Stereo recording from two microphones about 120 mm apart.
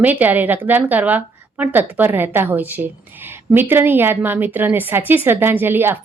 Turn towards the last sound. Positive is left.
turn(degrees=-20)  # may be behind; listen again after turning